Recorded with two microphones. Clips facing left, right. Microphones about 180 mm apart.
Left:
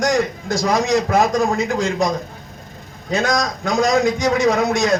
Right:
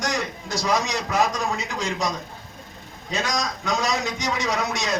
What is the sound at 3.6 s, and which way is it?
A man's voice, 50° left (ahead or behind).